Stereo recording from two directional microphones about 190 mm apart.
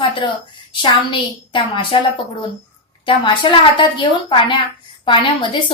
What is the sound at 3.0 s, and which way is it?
A woman's voice, 25° left (ahead or behind).